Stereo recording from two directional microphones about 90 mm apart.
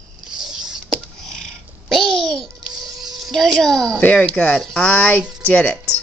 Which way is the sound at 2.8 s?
Centre (ahead or behind).